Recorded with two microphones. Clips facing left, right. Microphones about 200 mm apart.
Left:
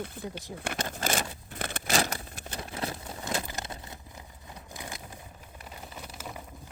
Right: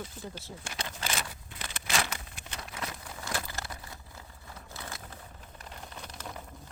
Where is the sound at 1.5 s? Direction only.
55° left (ahead or behind).